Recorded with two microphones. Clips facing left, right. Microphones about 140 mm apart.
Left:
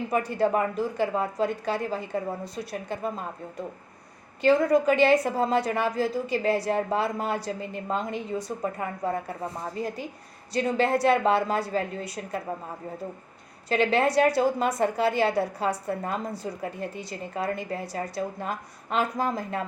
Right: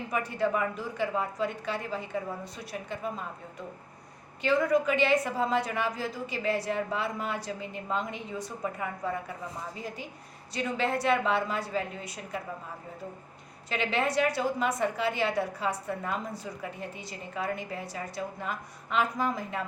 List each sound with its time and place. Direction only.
0.1 s a woman's voice: 35° left (ahead or behind)
4.4 s a woman's voice: 35° left (ahead or behind)
13.7 s a woman's voice: 35° left (ahead or behind)